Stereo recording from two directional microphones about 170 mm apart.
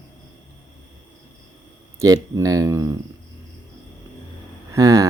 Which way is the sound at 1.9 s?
20° right (ahead or behind).